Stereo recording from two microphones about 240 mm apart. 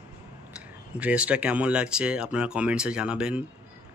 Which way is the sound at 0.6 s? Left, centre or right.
Centre.